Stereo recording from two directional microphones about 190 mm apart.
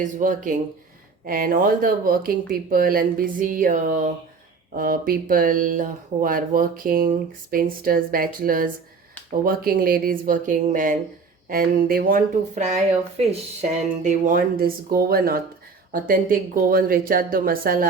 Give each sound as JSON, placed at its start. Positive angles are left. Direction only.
{"t": 0.0, "sound": "speech", "side_deg": -45}